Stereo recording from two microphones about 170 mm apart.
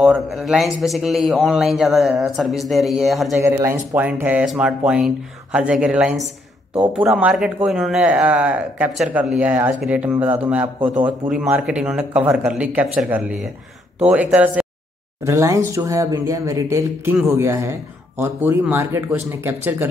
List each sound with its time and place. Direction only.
0.0 s a man's voice: centre (ahead or behind)
3.3 s speech: 15° right (ahead or behind)